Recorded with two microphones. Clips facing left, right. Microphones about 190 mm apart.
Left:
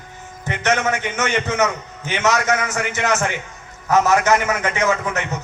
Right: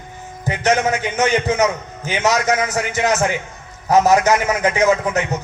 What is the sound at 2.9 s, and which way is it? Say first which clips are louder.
A man's voice: right 3 dB; 35° right (ahead or behind).